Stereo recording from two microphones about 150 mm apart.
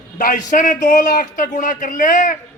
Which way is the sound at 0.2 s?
60° left (ahead or behind).